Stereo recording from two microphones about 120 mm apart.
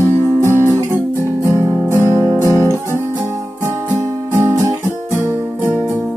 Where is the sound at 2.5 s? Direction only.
25° right (ahead or behind).